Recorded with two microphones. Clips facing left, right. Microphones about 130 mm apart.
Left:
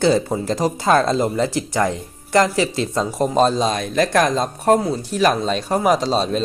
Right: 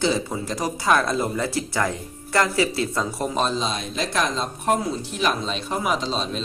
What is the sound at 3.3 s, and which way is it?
Speech, 40° left (ahead or behind).